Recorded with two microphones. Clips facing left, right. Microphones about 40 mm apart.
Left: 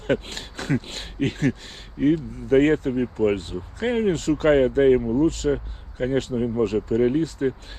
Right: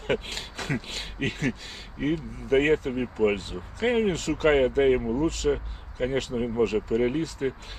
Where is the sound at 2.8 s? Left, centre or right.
Right.